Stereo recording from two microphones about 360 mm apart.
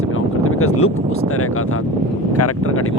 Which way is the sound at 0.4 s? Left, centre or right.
Left.